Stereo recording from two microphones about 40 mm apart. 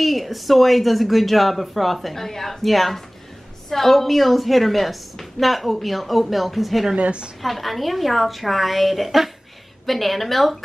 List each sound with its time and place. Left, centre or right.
0.0 s speech: centre
7.0 s a woman's voice: right
7.4 s speech: centre